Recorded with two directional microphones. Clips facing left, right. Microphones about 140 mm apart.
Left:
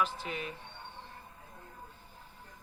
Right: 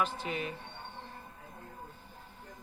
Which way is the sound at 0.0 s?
Centre (ahead or behind).